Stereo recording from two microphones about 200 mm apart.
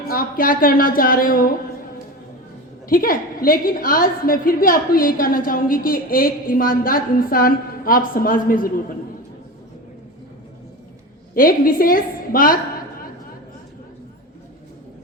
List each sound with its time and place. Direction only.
0.1 s a woman's voice: 45° left (ahead or behind)
2.9 s a woman's voice: 45° left (ahead or behind)
11.3 s a woman's voice: 45° left (ahead or behind)